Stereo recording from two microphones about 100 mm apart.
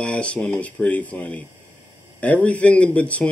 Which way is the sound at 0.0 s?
10° left (ahead or behind).